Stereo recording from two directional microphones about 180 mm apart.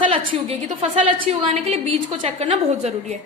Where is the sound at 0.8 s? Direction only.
30° right (ahead or behind).